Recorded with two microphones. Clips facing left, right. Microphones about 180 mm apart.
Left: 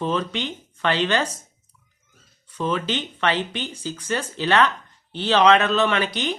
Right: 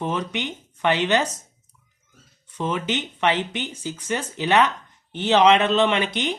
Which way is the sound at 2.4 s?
20° right (ahead or behind).